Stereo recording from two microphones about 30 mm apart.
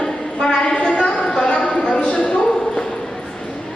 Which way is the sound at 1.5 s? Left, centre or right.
Left.